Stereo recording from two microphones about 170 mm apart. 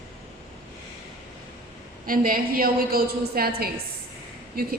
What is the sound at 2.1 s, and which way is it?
A woman's voice, 55° right (ahead or behind).